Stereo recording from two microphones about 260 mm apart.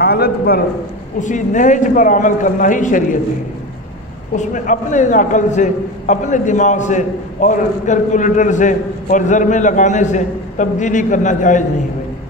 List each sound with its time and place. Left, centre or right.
0.0 s a man's voice: left
4.3 s a man's voice: left